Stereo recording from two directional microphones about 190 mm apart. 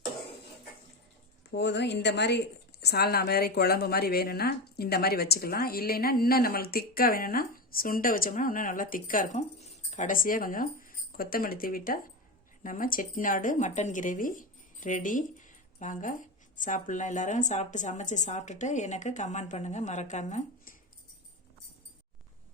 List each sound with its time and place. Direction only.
1.5 s a woman's voice: 65° left (ahead or behind); by 20.7 s 40° left (ahead or behind)